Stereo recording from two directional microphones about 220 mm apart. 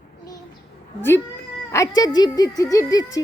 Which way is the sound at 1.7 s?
15° left (ahead or behind).